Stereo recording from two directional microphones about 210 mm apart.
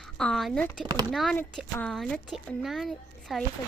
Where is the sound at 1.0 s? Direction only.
Centre (ahead or behind).